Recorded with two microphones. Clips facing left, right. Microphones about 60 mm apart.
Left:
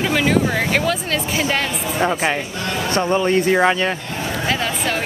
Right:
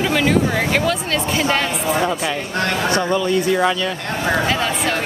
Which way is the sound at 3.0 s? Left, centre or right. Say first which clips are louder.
Left 1 dB; left.